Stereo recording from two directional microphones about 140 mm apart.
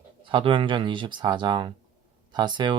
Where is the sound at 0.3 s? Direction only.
35° right (ahead or behind).